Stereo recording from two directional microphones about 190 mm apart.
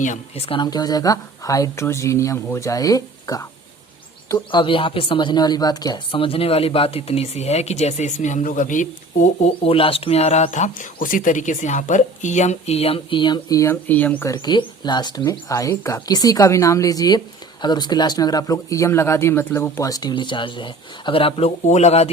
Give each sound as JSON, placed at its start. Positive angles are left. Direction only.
{"t": 0.0, "sound": "speech", "side_deg": 35}
{"t": 14.3, "sound": "speech", "side_deg": 25}